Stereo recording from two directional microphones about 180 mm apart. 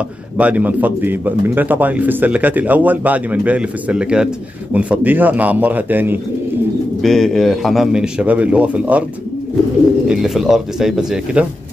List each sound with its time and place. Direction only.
0.4 s speech: 10° right (ahead or behind)
7.0 s a man's voice: centre (ahead or behind)
10.0 s a man's voice: centre (ahead or behind)